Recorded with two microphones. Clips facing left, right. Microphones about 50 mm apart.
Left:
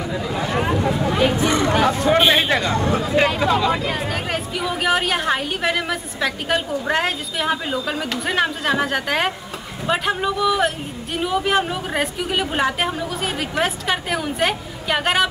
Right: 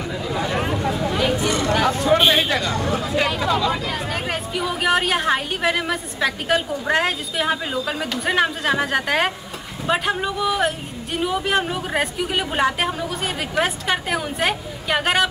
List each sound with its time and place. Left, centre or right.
1.1 s a sound: left
1.8 s speech: left
4.1 s a woman's voice: centre